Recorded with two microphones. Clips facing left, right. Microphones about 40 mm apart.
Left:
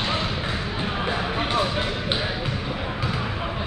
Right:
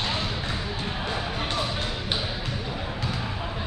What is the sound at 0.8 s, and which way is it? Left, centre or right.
Basketball bounce, left.